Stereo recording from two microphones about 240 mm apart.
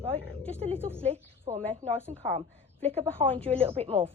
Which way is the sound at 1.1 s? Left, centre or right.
Right.